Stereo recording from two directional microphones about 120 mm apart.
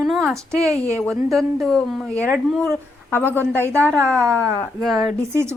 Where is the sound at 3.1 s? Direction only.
15° left (ahead or behind).